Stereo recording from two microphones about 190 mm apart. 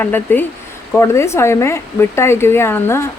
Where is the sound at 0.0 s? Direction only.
10° left (ahead or behind).